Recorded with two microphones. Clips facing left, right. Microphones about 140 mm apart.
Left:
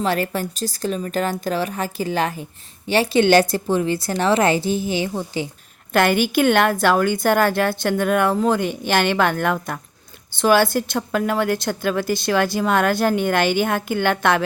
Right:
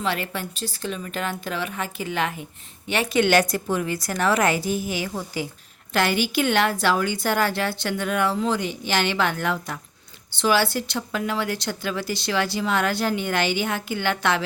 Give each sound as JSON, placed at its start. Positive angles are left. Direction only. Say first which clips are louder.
{"t": 0.0, "sound": "a woman's voice", "louder": "left 6 dB", "side_deg": 40}
{"t": 5.9, "sound": "a woman's voice", "louder": "left 5 dB", "side_deg": 50}